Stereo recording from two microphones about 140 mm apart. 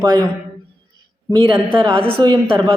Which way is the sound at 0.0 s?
30° right (ahead or behind).